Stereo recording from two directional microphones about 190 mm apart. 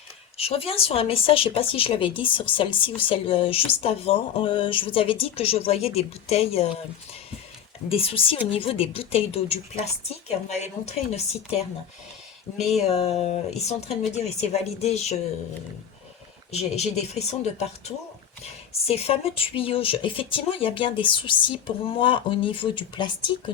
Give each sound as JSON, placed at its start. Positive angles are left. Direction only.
{"t": 0.3, "sound": "speech", "side_deg": 30}
{"t": 7.9, "sound": "speech", "side_deg": 30}
{"t": 12.9, "sound": "speech", "side_deg": 35}
{"t": 16.5, "sound": "speech", "side_deg": 35}